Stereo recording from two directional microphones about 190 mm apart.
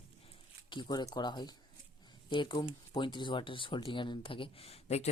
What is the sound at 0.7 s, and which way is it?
Speech, 25° left (ahead or behind).